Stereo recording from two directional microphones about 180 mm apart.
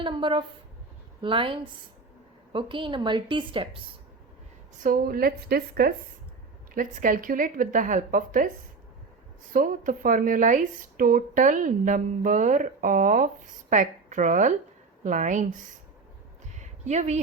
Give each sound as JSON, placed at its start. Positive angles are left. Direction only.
{"t": 0.0, "sound": "a woman's voice", "side_deg": -25}
{"t": 4.8, "sound": "a woman's voice", "side_deg": -50}
{"t": 6.7, "sound": "speech", "side_deg": -50}
{"t": 9.5, "sound": "speech", "side_deg": -50}
{"t": 16.6, "sound": "a sound", "side_deg": -40}